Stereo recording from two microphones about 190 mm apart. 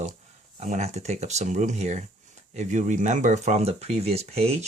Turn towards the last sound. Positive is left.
turn(degrees=-35)  # may be behind; listen again after turning